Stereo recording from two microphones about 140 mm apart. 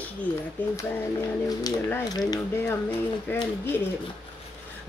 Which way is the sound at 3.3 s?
15° left (ahead or behind).